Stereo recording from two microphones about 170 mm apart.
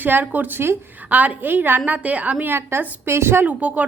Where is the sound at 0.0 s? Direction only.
10° right (ahead or behind).